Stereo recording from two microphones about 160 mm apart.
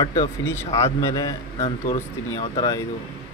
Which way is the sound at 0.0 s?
25° left (ahead or behind).